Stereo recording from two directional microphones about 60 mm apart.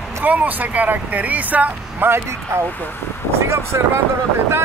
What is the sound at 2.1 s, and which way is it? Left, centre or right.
Speech, right.